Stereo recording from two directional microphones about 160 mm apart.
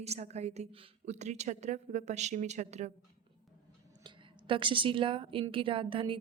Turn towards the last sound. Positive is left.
turn(degrees=-35)  # may be behind; listen again after turning